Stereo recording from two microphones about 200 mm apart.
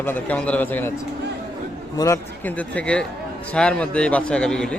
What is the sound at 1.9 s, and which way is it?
A man's voice, 15° left (ahead or behind).